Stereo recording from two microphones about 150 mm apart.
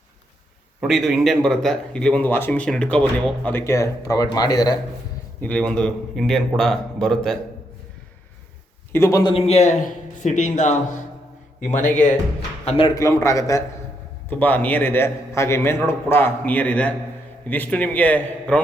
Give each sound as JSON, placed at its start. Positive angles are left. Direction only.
{"t": 0.8, "sound": "speech", "side_deg": 0}
{"t": 5.4, "sound": "speech", "side_deg": 10}
{"t": 8.9, "sound": "a man's voice", "side_deg": 20}
{"t": 9.2, "sound": "a man's voice", "side_deg": 40}
{"t": 12.6, "sound": "a man's voice", "side_deg": 40}
{"t": 12.9, "sound": "a man's voice", "side_deg": 20}